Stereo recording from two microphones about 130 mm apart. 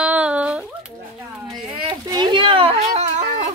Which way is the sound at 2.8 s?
70° right (ahead or behind).